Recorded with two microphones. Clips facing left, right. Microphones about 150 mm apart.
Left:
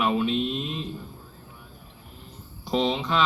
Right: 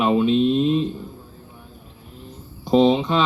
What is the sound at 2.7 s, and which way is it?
Speech, 25° right (ahead or behind).